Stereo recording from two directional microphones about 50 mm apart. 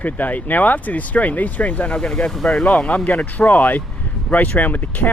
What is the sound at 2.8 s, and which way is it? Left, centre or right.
Speech, left.